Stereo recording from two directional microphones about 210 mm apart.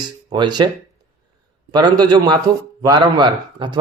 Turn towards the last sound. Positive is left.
turn(degrees=-20)  # may be behind; listen again after turning